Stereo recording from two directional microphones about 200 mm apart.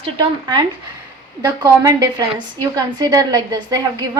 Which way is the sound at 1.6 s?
15° right (ahead or behind).